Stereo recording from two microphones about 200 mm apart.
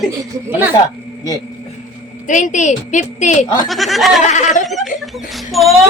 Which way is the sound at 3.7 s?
Centre (ahead or behind).